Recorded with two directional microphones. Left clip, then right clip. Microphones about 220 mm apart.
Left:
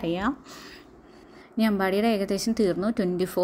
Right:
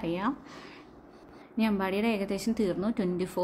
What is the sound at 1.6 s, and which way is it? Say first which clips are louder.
A woman's voice: left 5 dB; 20° left (ahead or behind).